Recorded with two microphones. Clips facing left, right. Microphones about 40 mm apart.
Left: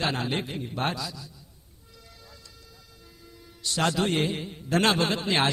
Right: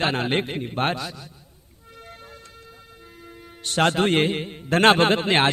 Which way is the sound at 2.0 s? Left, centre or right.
Right.